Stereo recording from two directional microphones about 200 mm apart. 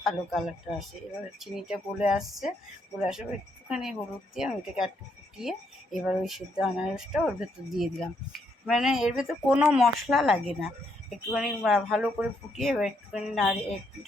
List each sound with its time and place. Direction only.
0.0 s speech: centre (ahead or behind)